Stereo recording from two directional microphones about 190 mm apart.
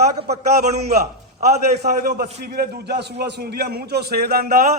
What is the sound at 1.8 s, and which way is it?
A man's voice, 55° right (ahead or behind).